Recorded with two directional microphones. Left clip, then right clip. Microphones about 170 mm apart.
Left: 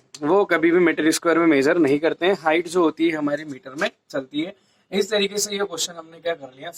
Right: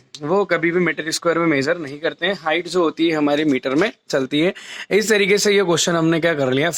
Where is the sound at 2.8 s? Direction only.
15° right (ahead or behind).